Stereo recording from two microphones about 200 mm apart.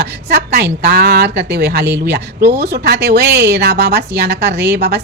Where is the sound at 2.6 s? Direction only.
55° right (ahead or behind).